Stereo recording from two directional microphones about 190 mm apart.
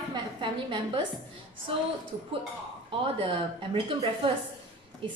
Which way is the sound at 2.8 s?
30° right (ahead or behind).